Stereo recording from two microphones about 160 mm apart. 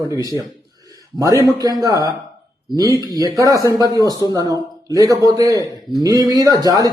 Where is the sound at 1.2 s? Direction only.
20° right (ahead or behind).